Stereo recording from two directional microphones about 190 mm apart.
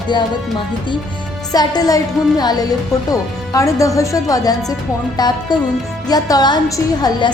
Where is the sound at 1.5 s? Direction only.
20° left (ahead or behind).